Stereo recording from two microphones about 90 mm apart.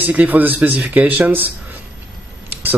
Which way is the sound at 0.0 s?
15° right (ahead or behind).